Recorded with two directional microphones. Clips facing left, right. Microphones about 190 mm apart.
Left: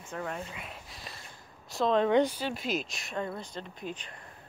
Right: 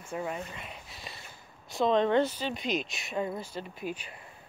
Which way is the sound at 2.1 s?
10° left (ahead or behind).